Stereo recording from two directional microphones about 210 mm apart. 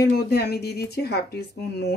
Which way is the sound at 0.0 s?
50° left (ahead or behind).